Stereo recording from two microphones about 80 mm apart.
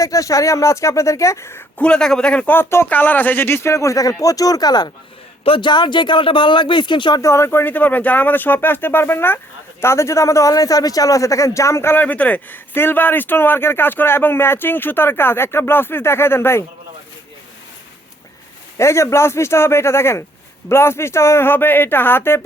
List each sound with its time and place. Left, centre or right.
0.0 s a man's voice: left
1.8 s a man's voice: centre
2.6 s a man's voice: left
5.5 s speech: left
7.2 s a man's voice: left
18.8 s a man's voice: left